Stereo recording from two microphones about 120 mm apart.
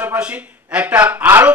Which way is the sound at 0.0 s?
10° right (ahead or behind).